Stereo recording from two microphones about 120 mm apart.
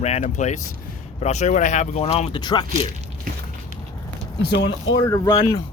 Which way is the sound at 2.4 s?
35° left (ahead or behind).